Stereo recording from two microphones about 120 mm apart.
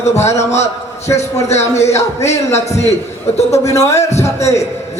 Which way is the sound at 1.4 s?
65° left (ahead or behind).